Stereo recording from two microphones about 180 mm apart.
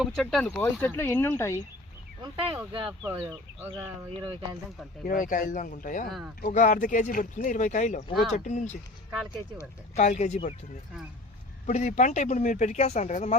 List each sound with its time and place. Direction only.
0.0 s speech: centre (ahead or behind)
2.2 s speech: 30° right (ahead or behind)
5.0 s speech: 50° left (ahead or behind)
9.9 s speech: 40° left (ahead or behind)
11.6 s speech: 40° left (ahead or behind)